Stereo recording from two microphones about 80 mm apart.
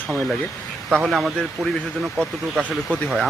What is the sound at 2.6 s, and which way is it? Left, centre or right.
Speech, centre.